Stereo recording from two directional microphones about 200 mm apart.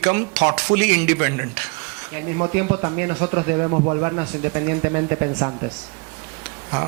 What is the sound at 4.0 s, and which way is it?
Speech, 15° right (ahead or behind).